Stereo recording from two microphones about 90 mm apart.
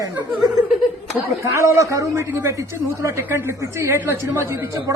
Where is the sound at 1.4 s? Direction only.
35° right (ahead or behind).